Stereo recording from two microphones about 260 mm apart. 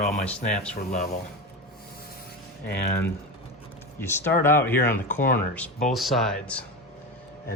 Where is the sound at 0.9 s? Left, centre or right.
Left.